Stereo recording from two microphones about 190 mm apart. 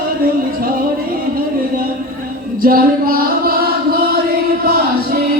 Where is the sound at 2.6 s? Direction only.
50° right (ahead or behind).